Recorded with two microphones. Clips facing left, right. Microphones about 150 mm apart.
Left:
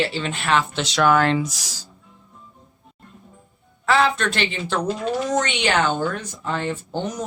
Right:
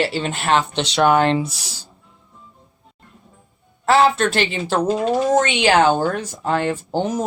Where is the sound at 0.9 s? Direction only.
20° right (ahead or behind).